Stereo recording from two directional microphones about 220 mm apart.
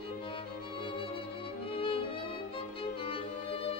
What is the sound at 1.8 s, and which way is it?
Violin, 25° left (ahead or behind).